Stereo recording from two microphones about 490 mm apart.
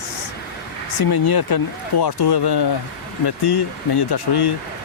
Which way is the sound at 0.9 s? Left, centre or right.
Left.